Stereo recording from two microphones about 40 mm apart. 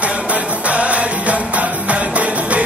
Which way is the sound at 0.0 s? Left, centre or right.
Right.